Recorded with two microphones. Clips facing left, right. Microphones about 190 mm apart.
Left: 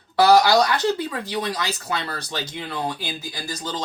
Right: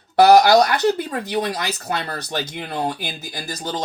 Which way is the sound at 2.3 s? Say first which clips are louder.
Right 5 dB; 50° right (ahead or behind).